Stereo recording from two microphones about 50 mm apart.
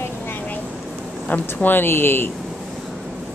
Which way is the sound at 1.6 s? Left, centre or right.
Left.